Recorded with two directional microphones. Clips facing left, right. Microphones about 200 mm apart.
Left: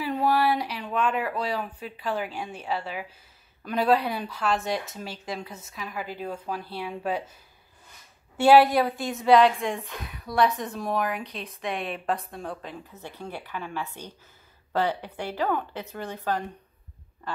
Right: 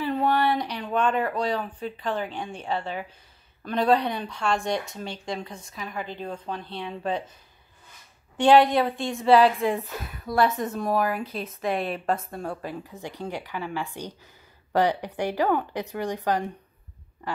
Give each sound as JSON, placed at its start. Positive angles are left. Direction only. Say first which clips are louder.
{"t": 0.0, "sound": "a sound", "louder": "even", "side_deg": 5}
{"t": 0.8, "sound": "a woman's voice", "louder": "right 3 dB", "side_deg": 5}
{"t": 8.4, "sound": "a woman's voice", "louder": "even", "side_deg": 5}